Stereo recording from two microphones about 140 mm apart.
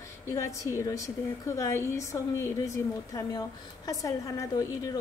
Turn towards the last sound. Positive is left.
turn(degrees=25)  # may be behind; listen again after turning